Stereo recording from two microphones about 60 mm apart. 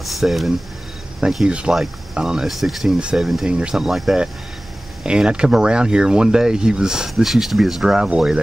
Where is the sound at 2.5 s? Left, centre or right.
Centre.